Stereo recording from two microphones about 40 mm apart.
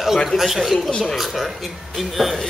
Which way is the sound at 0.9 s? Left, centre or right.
Centre.